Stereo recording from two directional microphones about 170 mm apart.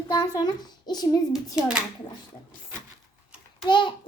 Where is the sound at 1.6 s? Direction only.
5° right (ahead or behind).